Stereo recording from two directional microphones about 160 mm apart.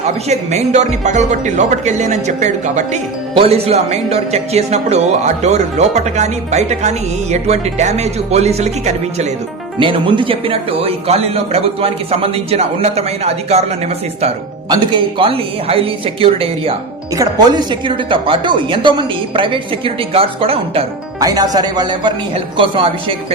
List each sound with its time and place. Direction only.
0.3 s speech: 45° right (ahead or behind)
9.7 s speech: 30° right (ahead or behind)
14.7 s speech: 30° right (ahead or behind)
17.2 s speech: 25° right (ahead or behind)
21.2 s speech: 25° right (ahead or behind)